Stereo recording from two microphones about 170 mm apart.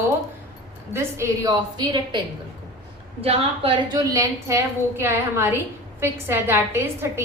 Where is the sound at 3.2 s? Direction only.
35° right (ahead or behind).